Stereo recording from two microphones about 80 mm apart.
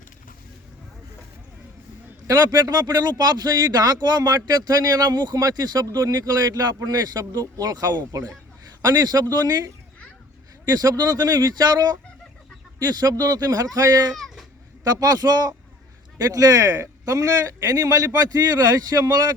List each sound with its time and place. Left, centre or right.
2.2 s speech: right
10.7 s speech: right
14.2 s cat: centre
14.8 s speech: right